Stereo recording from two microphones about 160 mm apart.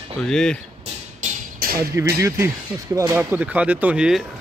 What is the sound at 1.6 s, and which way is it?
Music, 70° right (ahead or behind).